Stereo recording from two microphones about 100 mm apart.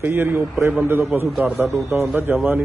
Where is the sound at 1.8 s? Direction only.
25° right (ahead or behind).